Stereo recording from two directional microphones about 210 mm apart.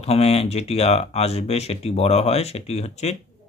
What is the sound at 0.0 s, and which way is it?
Speech, 30° left (ahead or behind).